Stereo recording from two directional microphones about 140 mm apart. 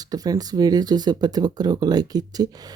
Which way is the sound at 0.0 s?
25° right (ahead or behind).